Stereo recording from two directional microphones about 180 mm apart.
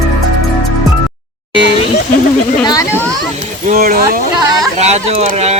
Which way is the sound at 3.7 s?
55° right (ahead or behind).